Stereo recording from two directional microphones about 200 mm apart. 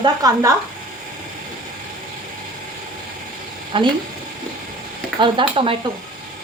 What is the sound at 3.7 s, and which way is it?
Speech, 25° right (ahead or behind).